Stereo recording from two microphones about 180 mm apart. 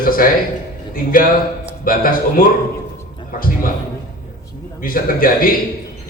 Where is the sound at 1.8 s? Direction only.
50° left (ahead or behind).